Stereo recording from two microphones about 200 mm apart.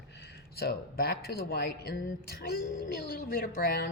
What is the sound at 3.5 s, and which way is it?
Speech, 45° left (ahead or behind).